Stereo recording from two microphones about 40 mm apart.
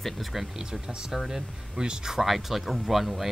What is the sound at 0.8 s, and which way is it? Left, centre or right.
Speech, centre.